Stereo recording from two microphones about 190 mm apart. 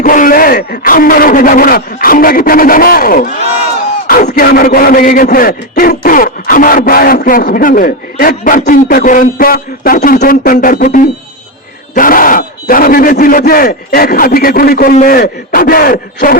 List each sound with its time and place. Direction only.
0.0 s a man's voice: 45° left (ahead or behind)